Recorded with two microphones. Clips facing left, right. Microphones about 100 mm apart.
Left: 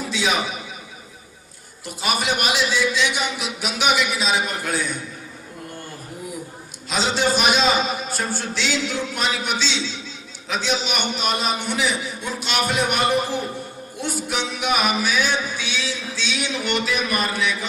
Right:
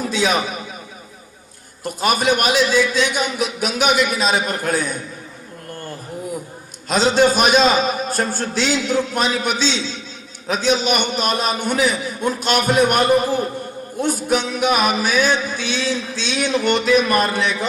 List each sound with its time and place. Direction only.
0.0 s a sound: 45° right (ahead or behind)
1.8 s music: 45° right (ahead or behind)
6.8 s music: 45° right (ahead or behind)